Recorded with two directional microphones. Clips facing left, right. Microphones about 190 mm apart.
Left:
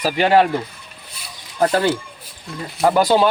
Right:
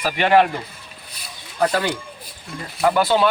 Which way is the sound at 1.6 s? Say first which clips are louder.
Left 2 dB; 40° left (ahead or behind).